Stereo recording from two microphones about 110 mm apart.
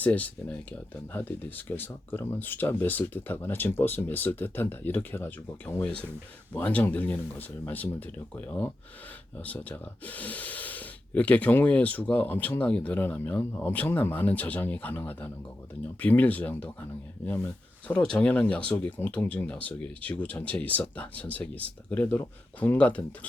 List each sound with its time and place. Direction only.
0.0 s speech: 15° left (ahead or behind)